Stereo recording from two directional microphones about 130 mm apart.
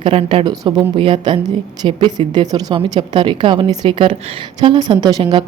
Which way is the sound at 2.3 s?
30° right (ahead or behind).